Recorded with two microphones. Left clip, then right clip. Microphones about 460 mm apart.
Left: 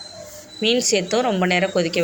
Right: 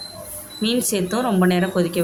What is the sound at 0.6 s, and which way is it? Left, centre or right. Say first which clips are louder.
Speech: left 3 dB; right.